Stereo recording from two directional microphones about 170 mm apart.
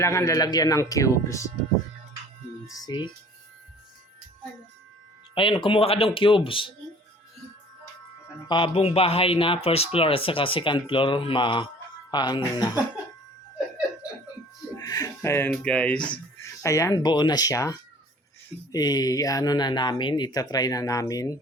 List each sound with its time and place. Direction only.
0.0 s speech: 15° left (ahead or behind)
2.6 s speech: 20° left (ahead or behind)
5.3 s speech: 30° left (ahead or behind)
8.4 s speech: 30° left (ahead or behind)
14.8 s speech: 20° left (ahead or behind); by 16.1 s 5° left (ahead or behind)
16.4 s speech: 20° left (ahead or behind)